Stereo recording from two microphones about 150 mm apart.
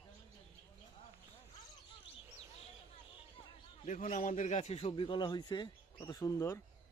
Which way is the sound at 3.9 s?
60° left (ahead or behind).